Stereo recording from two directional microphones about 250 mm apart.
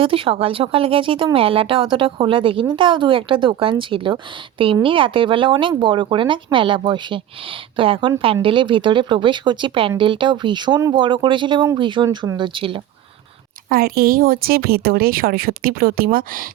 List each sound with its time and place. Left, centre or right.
0.0 s speech: right
13.7 s speech: right